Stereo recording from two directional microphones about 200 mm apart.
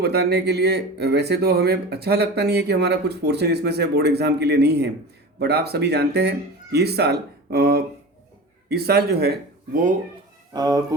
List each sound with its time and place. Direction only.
0.0 s speech: 55° right (ahead or behind)
10.5 s speech: 20° right (ahead or behind)